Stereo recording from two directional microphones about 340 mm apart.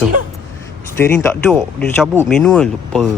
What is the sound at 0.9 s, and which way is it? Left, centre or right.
Speech, centre.